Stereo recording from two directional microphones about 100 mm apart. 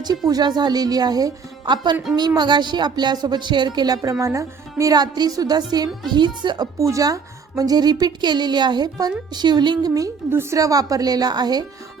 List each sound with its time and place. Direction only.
0.3 s speech: 40° right (ahead or behind)
6.7 s a woman's voice: 30° right (ahead or behind)